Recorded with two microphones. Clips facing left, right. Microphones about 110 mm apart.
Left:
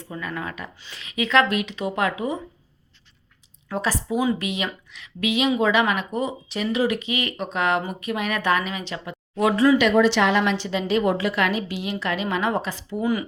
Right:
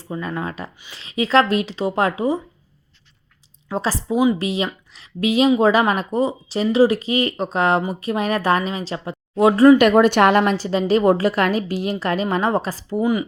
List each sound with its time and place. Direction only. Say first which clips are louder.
0.0 s speech: right 5 dB; 30° right (ahead or behind)
3.7 s speech: right 3 dB; 30° right (ahead or behind)
9.6 s speech: right 6 dB; 50° right (ahead or behind)
13.0 s speech: right 4 dB; 20° right (ahead or behind)